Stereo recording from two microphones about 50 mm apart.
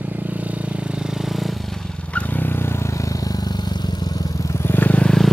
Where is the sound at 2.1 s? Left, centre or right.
Left.